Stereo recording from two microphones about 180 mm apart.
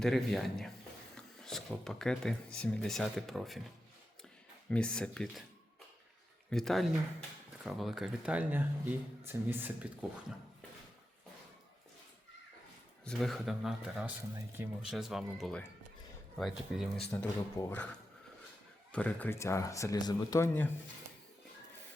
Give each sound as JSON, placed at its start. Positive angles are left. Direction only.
{"t": 0.0, "sound": "speech", "side_deg": 0}
{"t": 4.7, "sound": "speech", "side_deg": 5}
{"t": 6.5, "sound": "speech", "side_deg": 0}
{"t": 13.1, "sound": "speech", "side_deg": 0}
{"t": 18.9, "sound": "speech", "side_deg": 5}